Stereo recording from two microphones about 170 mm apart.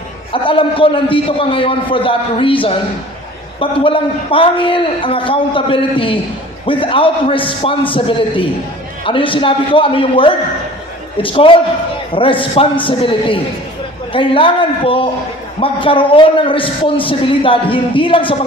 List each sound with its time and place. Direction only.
0.3 s a man's voice: 30° left (ahead or behind)